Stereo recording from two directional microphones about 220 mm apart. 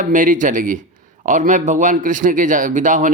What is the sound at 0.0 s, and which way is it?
A man's voice, 35° right (ahead or behind).